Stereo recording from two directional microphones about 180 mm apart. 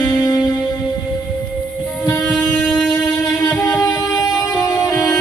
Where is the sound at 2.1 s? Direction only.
Centre (ahead or behind).